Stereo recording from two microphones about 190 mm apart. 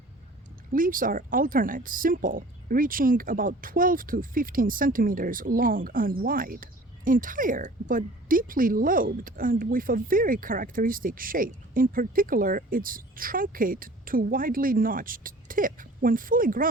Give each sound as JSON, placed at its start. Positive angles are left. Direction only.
{"t": 0.7, "sound": "speech", "side_deg": -45}